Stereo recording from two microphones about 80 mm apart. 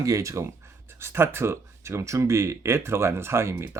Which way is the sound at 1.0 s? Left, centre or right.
Right.